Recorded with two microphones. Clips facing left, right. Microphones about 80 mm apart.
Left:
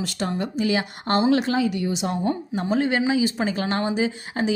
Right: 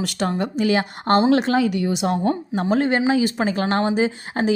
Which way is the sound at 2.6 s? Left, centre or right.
Right.